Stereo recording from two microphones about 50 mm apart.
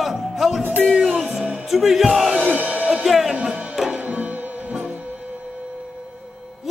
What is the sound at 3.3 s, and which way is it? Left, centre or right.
Music, centre.